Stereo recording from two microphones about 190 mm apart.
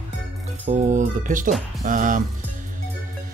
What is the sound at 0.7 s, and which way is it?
Speech, 40° right (ahead or behind).